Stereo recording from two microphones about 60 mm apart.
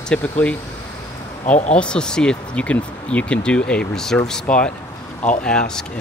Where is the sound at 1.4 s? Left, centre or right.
Centre.